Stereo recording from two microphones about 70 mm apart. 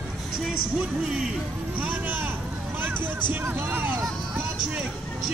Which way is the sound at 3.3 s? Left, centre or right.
Right.